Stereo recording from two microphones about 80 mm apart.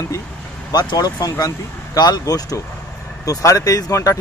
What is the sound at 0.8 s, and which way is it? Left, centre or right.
Speech, left.